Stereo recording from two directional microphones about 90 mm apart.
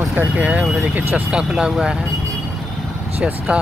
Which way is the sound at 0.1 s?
15° right (ahead or behind).